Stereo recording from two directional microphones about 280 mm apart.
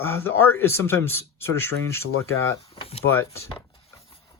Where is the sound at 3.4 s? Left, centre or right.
Centre.